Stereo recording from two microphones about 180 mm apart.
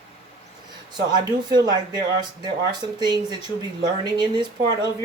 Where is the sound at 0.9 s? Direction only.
25° right (ahead or behind).